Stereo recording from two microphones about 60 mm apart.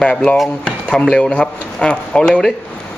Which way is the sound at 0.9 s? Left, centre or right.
Centre.